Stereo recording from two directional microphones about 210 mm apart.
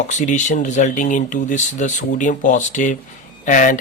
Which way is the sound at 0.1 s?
35° left (ahead or behind).